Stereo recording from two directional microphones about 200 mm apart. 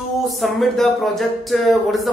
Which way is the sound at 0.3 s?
Centre (ahead or behind).